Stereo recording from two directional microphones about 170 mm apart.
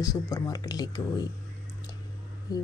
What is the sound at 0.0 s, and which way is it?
Speech, 20° left (ahead or behind).